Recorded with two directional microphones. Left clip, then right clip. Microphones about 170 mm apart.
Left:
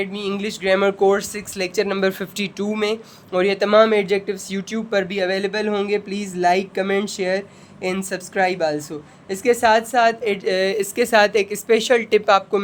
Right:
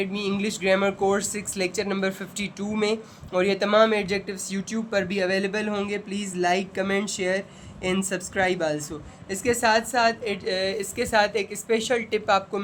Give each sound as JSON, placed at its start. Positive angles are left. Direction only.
{"t": 0.0, "sound": "speech", "side_deg": 30}